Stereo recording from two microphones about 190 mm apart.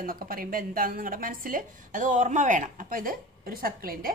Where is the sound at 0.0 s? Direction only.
50° right (ahead or behind).